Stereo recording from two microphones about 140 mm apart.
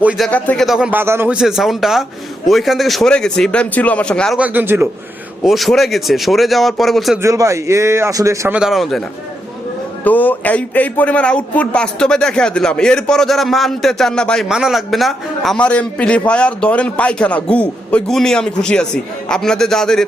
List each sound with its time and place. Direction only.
0.2 s speech: 10° left (ahead or behind)
0.9 s a man's voice: 15° right (ahead or behind)
1.4 s speech: 5° right (ahead or behind)
4.4 s a man's voice: 10° right (ahead or behind)
5.4 s speech: centre (ahead or behind)
7.2 s a man's voice: 20° right (ahead or behind)
8.5 s speech: centre (ahead or behind)
10.0 s a man's voice: 10° left (ahead or behind)